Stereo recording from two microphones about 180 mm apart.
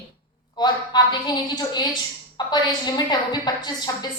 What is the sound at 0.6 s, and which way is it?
A woman's voice, 25° left (ahead or behind).